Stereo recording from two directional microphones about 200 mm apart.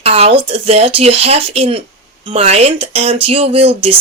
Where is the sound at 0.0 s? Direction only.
30° right (ahead or behind).